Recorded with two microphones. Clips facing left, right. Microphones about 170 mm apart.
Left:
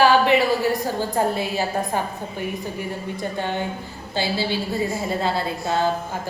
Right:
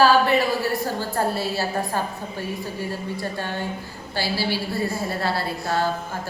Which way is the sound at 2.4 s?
15° left (ahead or behind).